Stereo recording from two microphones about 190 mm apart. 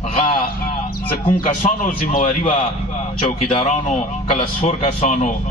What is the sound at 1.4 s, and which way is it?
A man's voice, 45° left (ahead or behind).